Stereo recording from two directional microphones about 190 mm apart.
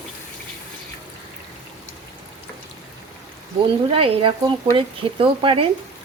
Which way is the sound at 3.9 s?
30° right (ahead or behind).